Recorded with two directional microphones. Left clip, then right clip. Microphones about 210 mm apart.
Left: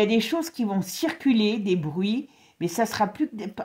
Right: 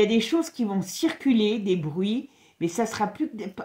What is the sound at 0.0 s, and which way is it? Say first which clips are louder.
Speech: right 1 dB; 40° left (ahead or behind).